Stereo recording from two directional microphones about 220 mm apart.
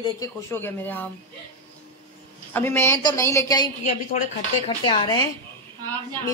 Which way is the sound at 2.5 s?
10° left (ahead or behind).